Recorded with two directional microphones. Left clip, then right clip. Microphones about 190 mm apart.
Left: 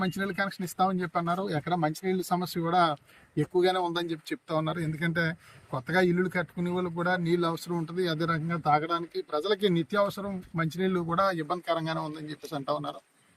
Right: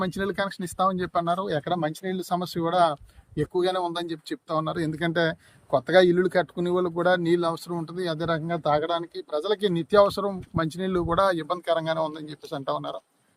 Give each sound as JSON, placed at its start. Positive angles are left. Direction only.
{"t": 0.2, "sound": "speech", "side_deg": -25}